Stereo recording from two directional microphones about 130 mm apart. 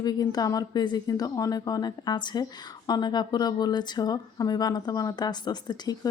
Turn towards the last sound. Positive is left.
turn(degrees=30)  # may be behind; listen again after turning